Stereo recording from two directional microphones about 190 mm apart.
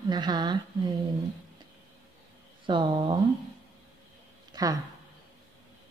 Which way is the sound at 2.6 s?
25° right (ahead or behind).